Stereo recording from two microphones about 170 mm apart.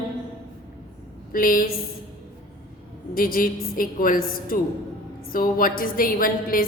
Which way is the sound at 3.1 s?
55° left (ahead or behind).